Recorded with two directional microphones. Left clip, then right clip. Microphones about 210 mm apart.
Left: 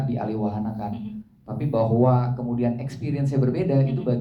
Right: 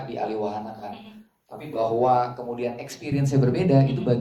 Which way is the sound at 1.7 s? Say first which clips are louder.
Right 1 dB; 45° left (ahead or behind).